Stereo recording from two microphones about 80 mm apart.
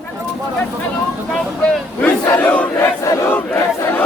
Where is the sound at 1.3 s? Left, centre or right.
Centre.